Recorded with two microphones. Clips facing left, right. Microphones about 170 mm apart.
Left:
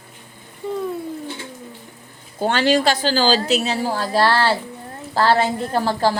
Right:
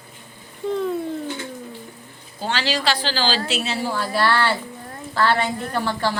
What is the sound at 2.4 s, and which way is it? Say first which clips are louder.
A woman's voice: left 7 dB; 50° left (ahead or behind).